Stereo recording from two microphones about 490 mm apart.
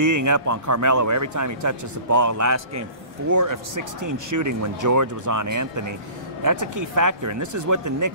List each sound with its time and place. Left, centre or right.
0.0 s a man's voice: right